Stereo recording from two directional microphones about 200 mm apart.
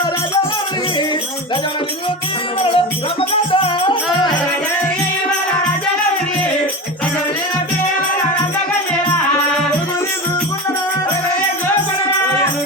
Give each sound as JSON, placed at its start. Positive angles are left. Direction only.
{"t": 2.6, "sound": "music", "side_deg": 25}